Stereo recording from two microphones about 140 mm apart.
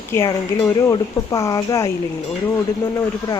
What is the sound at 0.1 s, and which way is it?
Speech, 25° left (ahead or behind).